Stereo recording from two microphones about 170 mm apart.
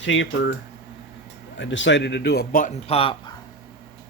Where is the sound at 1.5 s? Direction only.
90° left; by 2.7 s 55° left (ahead or behind).